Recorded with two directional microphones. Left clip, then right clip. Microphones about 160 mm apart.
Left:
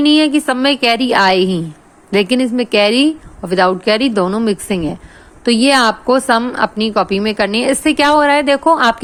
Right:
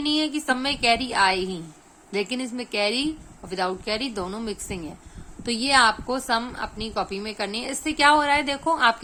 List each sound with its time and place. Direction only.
0.0 s a woman's voice: 40° left (ahead or behind)